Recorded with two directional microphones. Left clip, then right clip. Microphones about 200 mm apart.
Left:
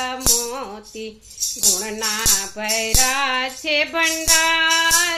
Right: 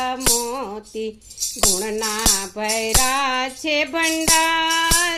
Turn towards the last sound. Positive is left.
turn(degrees=-40)  # may be behind; listen again after turning